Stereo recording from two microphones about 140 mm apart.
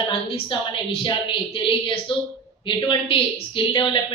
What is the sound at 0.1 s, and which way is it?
A woman's voice, 40° left (ahead or behind).